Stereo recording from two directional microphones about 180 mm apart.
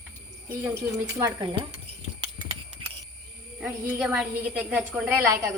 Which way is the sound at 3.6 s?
5° right (ahead or behind).